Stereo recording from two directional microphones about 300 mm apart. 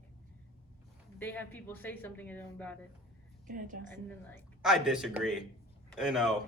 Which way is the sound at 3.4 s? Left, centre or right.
Right.